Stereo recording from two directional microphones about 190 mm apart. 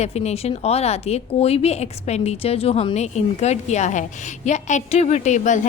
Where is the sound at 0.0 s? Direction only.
35° left (ahead or behind).